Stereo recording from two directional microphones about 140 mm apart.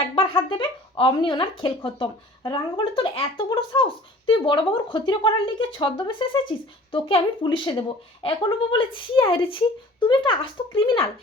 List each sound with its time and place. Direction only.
0.2 s speech: 40° left (ahead or behind)